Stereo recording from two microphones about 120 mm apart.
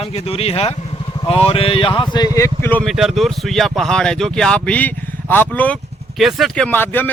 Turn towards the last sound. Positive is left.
turn(degrees=15)  # may be behind; listen again after turning